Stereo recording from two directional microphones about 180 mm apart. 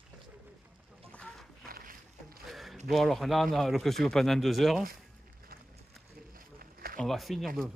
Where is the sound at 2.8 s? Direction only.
Centre (ahead or behind).